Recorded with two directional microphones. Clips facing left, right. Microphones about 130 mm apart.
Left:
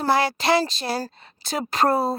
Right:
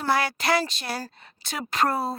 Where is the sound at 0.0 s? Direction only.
30° left (ahead or behind).